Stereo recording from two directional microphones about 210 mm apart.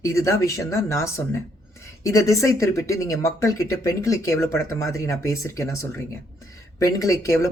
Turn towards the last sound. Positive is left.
turn(degrees=15)  # may be behind; listen again after turning